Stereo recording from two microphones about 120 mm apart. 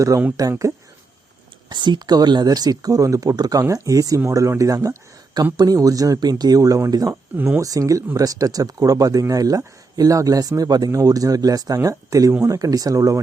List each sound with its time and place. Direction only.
0.4 s speech: 30° right (ahead or behind)
1.7 s speech: 40° right (ahead or behind)
7.3 s speech: 15° right (ahead or behind)
7.6 s speech: 30° right (ahead or behind)